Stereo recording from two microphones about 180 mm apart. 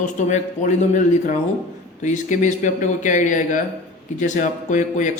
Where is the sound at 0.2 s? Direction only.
40° left (ahead or behind).